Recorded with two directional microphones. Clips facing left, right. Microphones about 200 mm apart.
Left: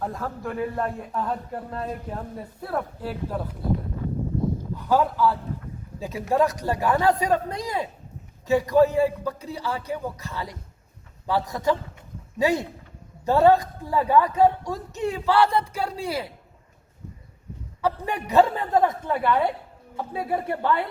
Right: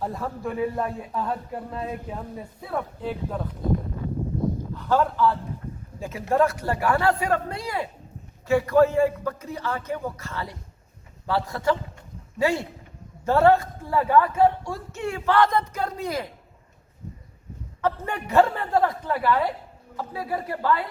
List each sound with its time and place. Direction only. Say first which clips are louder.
0.0 s a man's voice: right 1 dB; centre (ahead or behind)
4.8 s a man's voice: even; 10° left (ahead or behind)
17.7 s a woman's voice: left 1 dB; 15° left (ahead or behind)